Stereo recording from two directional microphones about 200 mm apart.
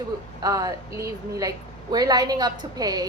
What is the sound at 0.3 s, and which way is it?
A woman's voice, 15° right (ahead or behind).